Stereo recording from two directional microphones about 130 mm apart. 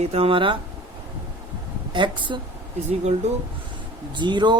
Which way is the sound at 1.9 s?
40° right (ahead or behind).